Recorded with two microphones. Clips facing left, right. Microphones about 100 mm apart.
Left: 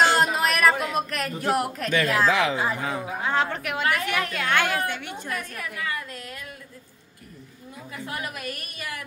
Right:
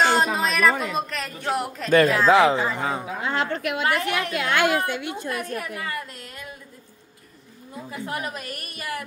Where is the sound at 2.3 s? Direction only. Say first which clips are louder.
Right 6 dB; 35° right (ahead or behind).